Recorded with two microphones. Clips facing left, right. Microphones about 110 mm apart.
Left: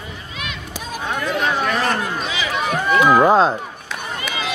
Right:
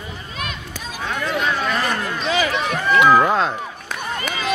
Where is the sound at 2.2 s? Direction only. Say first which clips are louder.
Right 5 dB; 50° right (ahead or behind).